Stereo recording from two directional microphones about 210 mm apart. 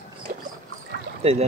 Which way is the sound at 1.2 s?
30° right (ahead or behind).